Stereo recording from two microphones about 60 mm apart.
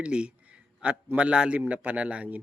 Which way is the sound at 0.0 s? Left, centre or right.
Centre.